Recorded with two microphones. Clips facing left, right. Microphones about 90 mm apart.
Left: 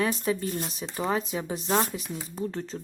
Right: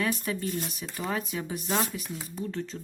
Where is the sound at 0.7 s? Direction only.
25° left (ahead or behind).